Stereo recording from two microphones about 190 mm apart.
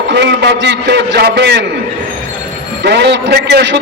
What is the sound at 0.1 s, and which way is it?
A man's voice, 65° right (ahead or behind).